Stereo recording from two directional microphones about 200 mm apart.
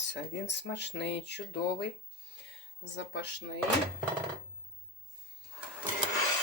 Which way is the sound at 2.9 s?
60° left (ahead or behind).